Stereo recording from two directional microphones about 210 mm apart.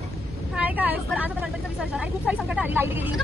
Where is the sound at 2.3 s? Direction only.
5° right (ahead or behind).